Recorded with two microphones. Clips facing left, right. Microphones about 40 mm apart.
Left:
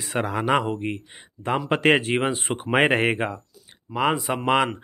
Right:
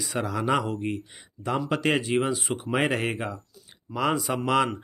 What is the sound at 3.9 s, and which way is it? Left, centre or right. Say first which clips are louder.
Speech: left 3 dB; left.